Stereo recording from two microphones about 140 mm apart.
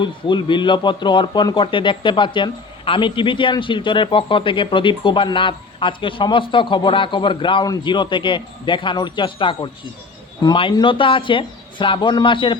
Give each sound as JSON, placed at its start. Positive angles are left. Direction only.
{"t": 0.0, "sound": "speech", "side_deg": 35}